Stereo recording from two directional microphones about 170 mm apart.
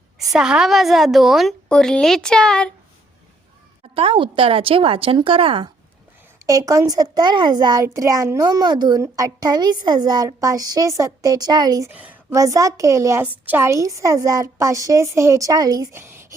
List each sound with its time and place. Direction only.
0.3 s a woman's voice: 5° right (ahead or behind)
3.9 s a woman's voice: 30° right (ahead or behind)
6.4 s a child's voice: 20° right (ahead or behind)
11.9 s a child's voice: 10° right (ahead or behind)